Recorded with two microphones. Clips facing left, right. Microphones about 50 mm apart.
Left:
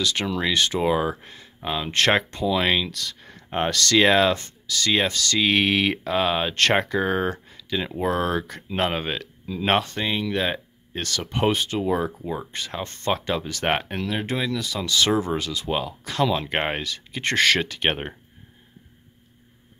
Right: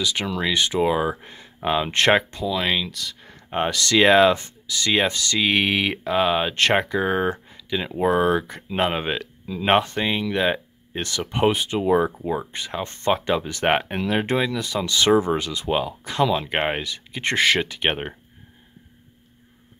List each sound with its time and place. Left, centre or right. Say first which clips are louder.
0.0 s speech: even; centre
0.7 s speech: right 1 dB; centre
1.2 s speech: right 5 dB; centre
2.3 s speech: left 2 dB; centre
3.8 s speech: right 3 dB; centre
13.7 s speech: right 3 dB; centre
14.0 s speech: right 4 dB; right
16.3 s speech: right 2 dB; centre
16.8 s speech: right 1 dB; centre